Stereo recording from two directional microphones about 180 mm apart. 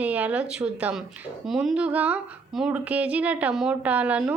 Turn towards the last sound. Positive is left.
turn(degrees=-5)  # may be behind; listen again after turning